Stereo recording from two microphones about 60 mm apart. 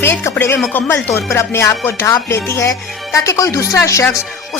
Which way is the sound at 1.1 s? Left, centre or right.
Left.